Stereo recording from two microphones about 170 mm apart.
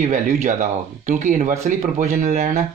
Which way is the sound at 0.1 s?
50° right (ahead or behind).